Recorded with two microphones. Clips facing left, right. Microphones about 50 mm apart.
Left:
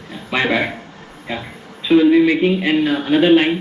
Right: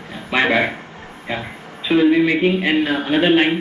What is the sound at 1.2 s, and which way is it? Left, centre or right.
Speech, centre.